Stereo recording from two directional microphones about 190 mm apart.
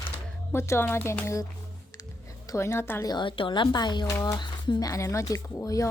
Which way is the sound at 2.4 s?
15° left (ahead or behind).